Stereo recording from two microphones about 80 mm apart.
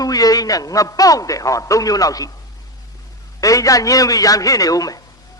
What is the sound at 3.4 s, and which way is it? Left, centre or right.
A man's voice, left.